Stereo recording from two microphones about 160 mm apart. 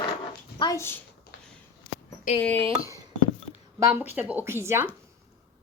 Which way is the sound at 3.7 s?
15° right (ahead or behind).